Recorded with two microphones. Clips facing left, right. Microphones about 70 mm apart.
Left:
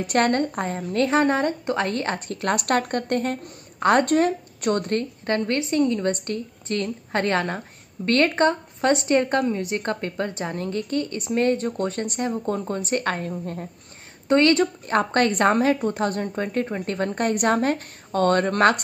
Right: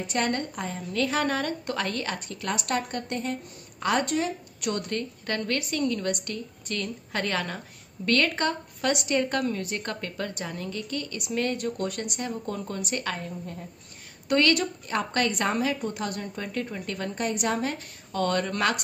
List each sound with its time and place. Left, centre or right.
0.0 s a woman's voice: left
14.2 s a woman's voice: left